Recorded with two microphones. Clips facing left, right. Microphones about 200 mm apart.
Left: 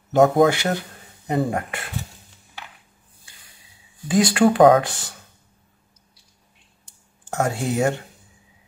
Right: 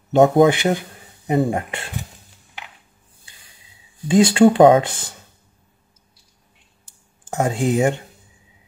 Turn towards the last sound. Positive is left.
turn(degrees=-15)  # may be behind; listen again after turning